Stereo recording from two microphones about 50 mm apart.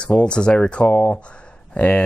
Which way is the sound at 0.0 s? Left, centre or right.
Left.